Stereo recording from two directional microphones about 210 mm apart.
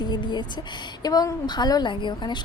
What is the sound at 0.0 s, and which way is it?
A woman's voice, 20° left (ahead or behind).